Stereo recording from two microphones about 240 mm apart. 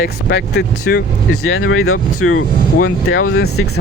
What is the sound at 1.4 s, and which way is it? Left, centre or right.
Speech, left.